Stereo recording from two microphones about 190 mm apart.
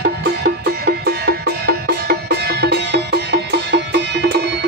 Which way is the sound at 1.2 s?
60° right (ahead or behind).